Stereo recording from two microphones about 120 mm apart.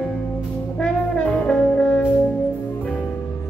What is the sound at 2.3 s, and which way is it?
Music, 10° left (ahead or behind).